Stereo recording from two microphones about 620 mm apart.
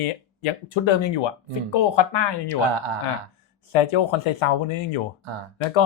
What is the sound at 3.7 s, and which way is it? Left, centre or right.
Speech, left.